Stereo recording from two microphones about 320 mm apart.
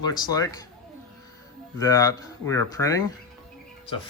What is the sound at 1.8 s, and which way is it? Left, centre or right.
Speech, centre.